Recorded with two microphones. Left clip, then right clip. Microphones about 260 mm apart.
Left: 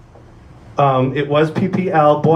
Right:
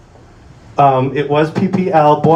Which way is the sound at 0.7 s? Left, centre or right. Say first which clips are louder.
Right 3 dB; right.